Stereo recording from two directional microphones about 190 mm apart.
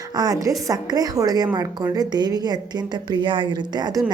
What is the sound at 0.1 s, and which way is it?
A woman's voice, 20° right (ahead or behind).